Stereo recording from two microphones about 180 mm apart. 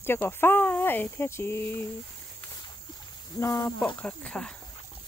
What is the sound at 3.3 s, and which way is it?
Wild animals, 20° left (ahead or behind).